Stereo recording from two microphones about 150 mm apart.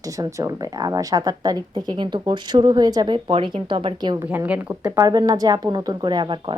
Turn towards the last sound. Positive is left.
turn(degrees=-30)  # may be behind; listen again after turning